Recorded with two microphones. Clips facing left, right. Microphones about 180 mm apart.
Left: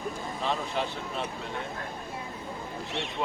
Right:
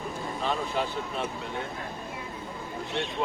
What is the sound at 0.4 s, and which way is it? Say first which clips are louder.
Speech: right 1 dB; centre (ahead or behind).